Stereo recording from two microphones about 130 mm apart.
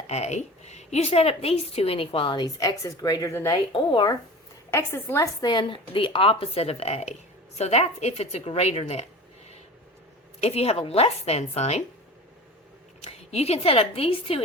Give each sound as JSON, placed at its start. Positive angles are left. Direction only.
{"t": 0.1, "sound": "a woman's voice", "side_deg": 60}
{"t": 3.7, "sound": "speech", "side_deg": 35}
{"t": 4.7, "sound": "a woman's voice", "side_deg": 20}
{"t": 5.5, "sound": "a woman's voice", "side_deg": 35}
{"t": 10.4, "sound": "a woman's voice", "side_deg": 50}
{"t": 13.0, "sound": "a woman's voice", "side_deg": 55}